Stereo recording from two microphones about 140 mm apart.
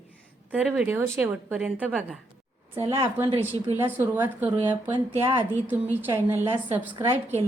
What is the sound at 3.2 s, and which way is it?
Speech, 40° right (ahead or behind).